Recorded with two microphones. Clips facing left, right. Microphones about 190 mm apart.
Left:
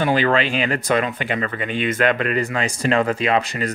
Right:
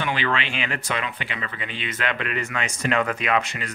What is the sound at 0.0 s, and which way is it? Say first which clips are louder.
Speech: left 8 dB; 40° left (ahead or behind).